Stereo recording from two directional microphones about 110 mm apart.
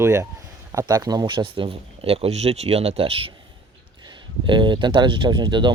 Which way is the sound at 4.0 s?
45° right (ahead or behind).